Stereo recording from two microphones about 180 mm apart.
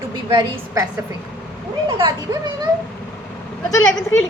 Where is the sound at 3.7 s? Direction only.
90° left.